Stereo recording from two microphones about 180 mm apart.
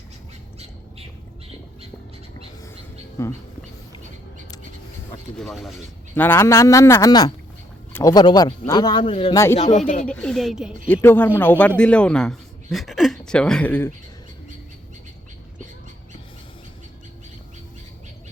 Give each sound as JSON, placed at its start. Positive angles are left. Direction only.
{"t": 3.2, "sound": "speech", "side_deg": 15}
{"t": 5.4, "sound": "speech", "side_deg": 0}
{"t": 6.1, "sound": "speech", "side_deg": 10}
{"t": 9.3, "sound": "speech", "side_deg": 15}
{"t": 9.7, "sound": "speech", "side_deg": 45}
{"t": 10.1, "sound": "speech", "side_deg": 5}
{"t": 10.8, "sound": "speech", "side_deg": 10}